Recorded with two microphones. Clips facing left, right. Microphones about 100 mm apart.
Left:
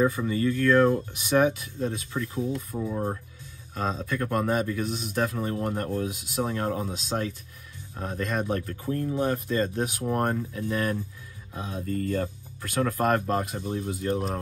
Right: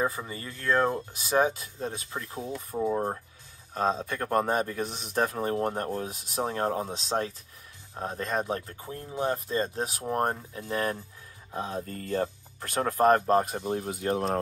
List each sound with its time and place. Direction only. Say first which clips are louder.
0.0 s speech: left 7 dB; 30° right (ahead or behind); by 14.2 s 55° right (ahead or behind)